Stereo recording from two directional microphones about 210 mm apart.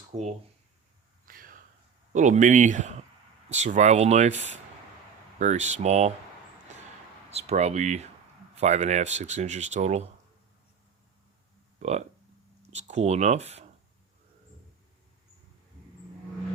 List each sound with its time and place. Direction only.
1.2 s a sound: 40° right (ahead or behind)
2.1 s speech: 35° right (ahead or behind)
7.3 s speech: 30° right (ahead or behind)
11.8 s speech: 30° right (ahead or behind)